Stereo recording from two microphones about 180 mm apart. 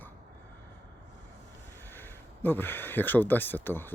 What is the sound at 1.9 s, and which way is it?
Speech, 10° left (ahead or behind).